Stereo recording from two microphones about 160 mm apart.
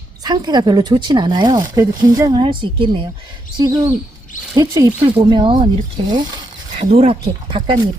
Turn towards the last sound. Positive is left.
turn(degrees=-35)  # may be behind; listen again after turning